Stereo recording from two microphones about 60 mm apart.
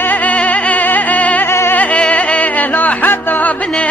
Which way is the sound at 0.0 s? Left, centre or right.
Left.